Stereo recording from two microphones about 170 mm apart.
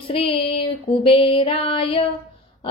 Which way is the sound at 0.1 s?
30° left (ahead or behind).